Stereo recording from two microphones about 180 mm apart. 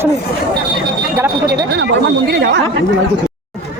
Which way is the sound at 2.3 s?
65° right (ahead or behind).